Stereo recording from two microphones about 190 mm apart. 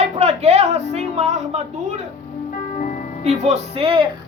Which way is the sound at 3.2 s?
35° right (ahead or behind).